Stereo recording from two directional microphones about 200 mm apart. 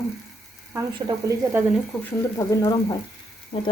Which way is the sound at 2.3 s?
20° left (ahead or behind).